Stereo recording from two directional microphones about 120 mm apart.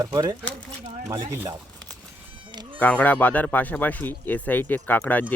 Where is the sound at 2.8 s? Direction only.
10° left (ahead or behind).